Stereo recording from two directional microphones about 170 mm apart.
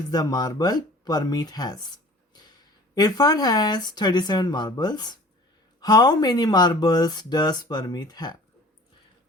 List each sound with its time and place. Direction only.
0.1 s speech: 20° left (ahead or behind)
2.9 s speech: 25° left (ahead or behind)